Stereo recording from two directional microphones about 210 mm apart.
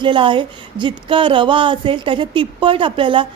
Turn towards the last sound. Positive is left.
turn(degrees=-25)  # may be behind; listen again after turning